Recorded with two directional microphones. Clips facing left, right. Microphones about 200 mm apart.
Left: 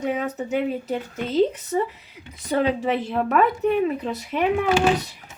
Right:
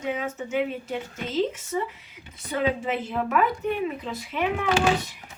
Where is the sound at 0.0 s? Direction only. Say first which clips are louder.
Left 4 dB; 40° left (ahead or behind).